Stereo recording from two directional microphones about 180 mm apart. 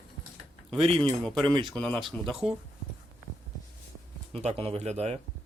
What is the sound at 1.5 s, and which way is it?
Speech, 25° right (ahead or behind).